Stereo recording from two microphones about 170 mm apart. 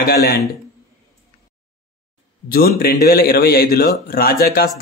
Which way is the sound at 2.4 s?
60° left (ahead or behind).